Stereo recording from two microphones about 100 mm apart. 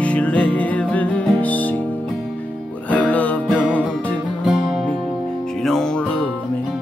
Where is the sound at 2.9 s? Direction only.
15° left (ahead or behind).